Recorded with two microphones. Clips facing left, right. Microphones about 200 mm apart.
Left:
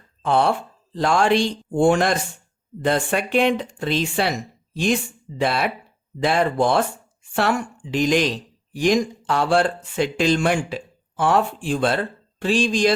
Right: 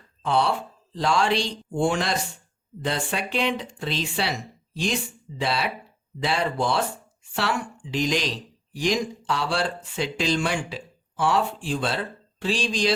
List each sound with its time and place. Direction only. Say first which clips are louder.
0.2 s speech: left 4 dB; 50° left (ahead or behind)